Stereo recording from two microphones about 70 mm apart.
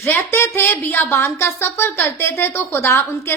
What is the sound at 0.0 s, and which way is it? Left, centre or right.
Speech, left.